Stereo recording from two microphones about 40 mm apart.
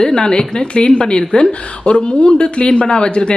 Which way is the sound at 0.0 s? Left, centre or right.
Centre.